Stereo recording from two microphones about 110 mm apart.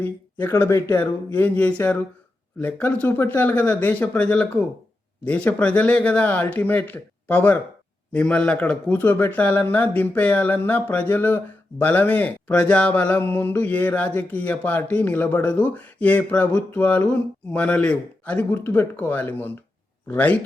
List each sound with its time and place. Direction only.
0.0 s speech: 20° left (ahead or behind)